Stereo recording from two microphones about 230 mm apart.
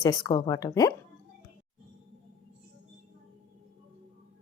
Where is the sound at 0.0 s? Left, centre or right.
Centre.